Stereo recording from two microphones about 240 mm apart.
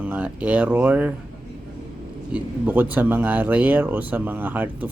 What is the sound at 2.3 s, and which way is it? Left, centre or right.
Speech, centre.